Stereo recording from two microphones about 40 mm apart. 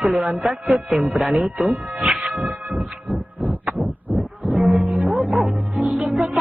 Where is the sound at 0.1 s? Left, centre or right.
Right.